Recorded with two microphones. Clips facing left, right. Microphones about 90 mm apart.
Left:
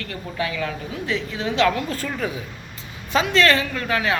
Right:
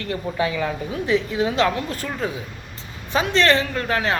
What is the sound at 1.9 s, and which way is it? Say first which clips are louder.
A man's voice: even; 20° right (ahead or behind).